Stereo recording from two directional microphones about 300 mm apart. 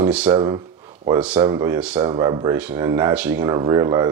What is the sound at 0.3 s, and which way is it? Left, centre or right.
Speech, centre.